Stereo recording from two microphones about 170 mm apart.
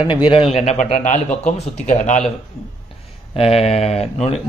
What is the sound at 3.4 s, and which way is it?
Speech, 35° left (ahead or behind).